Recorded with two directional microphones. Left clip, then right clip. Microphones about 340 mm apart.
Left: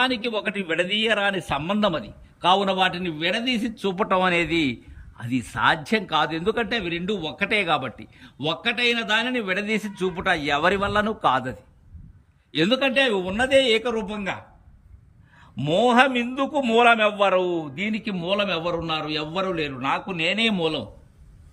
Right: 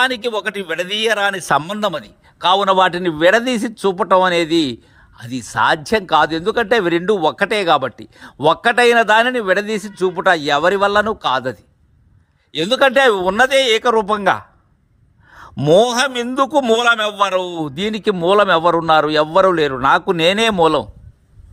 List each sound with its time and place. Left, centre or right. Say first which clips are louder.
0.0 s a man's voice: right 6 dB; centre
15.8 s a man's voice: right 3 dB; centre
20.4 s a man's voice: right 9 dB; right